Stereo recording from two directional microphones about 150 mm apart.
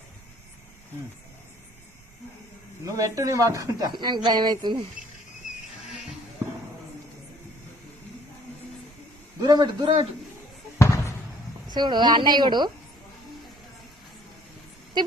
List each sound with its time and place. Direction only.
2.8 s speech: 20° right (ahead or behind)
9.4 s a woman's voice: 25° right (ahead or behind)
10.8 s basketball bounce: 20° left (ahead or behind)
11.7 s speech: 30° right (ahead or behind)